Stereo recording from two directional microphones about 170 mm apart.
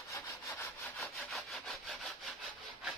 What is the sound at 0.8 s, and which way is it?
Sawing, centre (ahead or behind).